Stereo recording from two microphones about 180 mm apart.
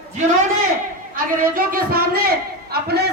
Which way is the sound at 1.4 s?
50° right (ahead or behind).